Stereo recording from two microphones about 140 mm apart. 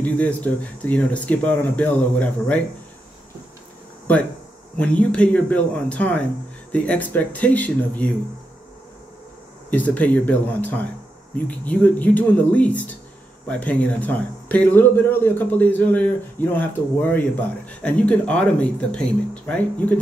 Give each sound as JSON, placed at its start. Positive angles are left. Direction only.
{"t": 0.0, "sound": "speech", "side_deg": 10}
{"t": 4.7, "sound": "speech", "side_deg": 10}
{"t": 9.7, "sound": "speech", "side_deg": 10}